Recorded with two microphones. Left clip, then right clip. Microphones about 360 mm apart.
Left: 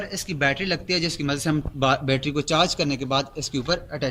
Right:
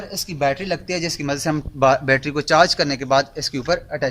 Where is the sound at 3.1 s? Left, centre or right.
Centre.